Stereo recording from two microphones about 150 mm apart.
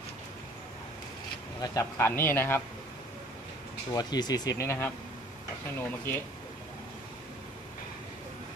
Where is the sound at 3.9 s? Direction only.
25° left (ahead or behind).